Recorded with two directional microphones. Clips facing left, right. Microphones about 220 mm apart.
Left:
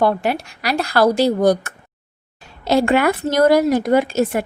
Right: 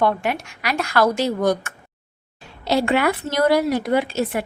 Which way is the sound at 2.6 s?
45° left (ahead or behind).